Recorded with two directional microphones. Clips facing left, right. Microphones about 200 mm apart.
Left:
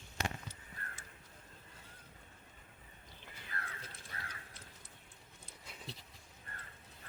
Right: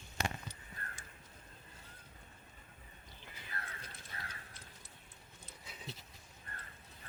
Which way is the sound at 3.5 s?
25° right (ahead or behind).